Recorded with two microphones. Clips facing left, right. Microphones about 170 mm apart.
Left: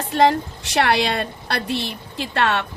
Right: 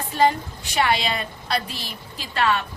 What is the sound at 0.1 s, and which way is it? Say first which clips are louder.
A woman's voice: left 3 dB; 75° left (ahead or behind).